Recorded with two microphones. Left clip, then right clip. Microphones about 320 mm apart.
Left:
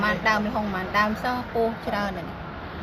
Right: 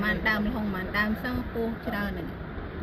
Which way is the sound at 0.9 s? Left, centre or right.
Centre.